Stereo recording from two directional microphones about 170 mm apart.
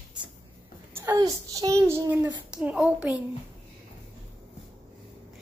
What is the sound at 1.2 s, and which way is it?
A child's voice, 20° right (ahead or behind).